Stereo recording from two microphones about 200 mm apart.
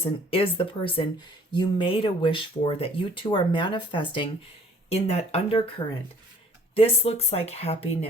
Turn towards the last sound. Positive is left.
turn(degrees=30)  # may be behind; listen again after turning